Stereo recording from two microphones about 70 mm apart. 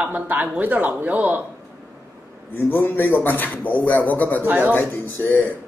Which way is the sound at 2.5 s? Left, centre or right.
Left.